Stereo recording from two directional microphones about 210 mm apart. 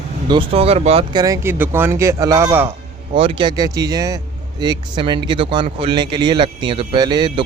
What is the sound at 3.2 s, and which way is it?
Speech, 25° right (ahead or behind).